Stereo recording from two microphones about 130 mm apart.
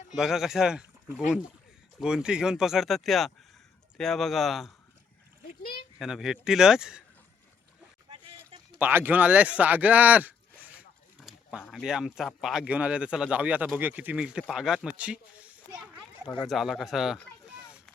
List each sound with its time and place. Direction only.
0.2 s speech: 5° right (ahead or behind)
6.0 s speech: 5° right (ahead or behind)
8.1 s a sound: 45° right (ahead or behind)
8.8 s speech: 15° right (ahead or behind)
11.2 s a sound: 5° right (ahead or behind)
11.7 s speech: 5° right (ahead or behind)